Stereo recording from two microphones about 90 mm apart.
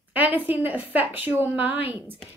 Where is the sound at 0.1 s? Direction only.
20° right (ahead or behind).